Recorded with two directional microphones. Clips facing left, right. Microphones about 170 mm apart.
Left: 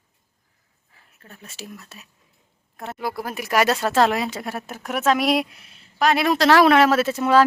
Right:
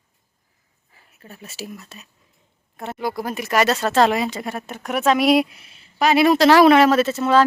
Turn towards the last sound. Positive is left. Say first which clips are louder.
# right 1 dB
turn(degrees=10)  # may be behind; listen again after turning